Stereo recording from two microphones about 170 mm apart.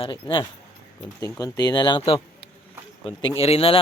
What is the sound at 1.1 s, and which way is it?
Speech, 20° left (ahead or behind).